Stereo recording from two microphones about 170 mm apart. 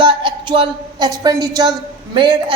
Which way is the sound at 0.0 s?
30° right (ahead or behind).